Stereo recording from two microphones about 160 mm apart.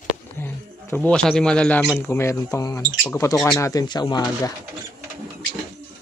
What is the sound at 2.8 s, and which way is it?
Speech, 10° left (ahead or behind).